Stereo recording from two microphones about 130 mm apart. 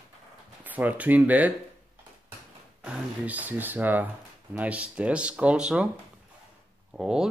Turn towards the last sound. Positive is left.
turn(degrees=-5)  # may be behind; listen again after turning